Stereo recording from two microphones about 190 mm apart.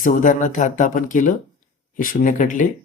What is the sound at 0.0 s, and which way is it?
Speech, 45° left (ahead or behind).